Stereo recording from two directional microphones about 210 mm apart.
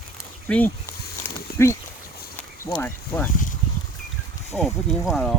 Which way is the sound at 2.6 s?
10° left (ahead or behind).